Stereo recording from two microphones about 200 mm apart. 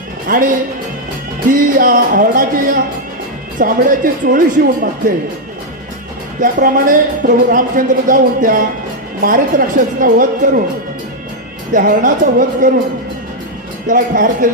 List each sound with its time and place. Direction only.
0.3 s speech: 45° right (ahead or behind)
6.4 s speech: 45° right (ahead or behind)
11.7 s speech: 40° right (ahead or behind)
13.8 s speech: 40° right (ahead or behind)